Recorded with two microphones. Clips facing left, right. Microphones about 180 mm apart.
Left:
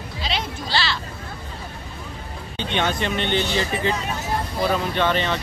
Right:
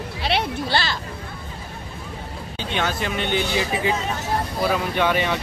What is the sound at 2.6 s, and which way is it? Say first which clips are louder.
Speech: left 2 dB; 5° right (ahead or behind).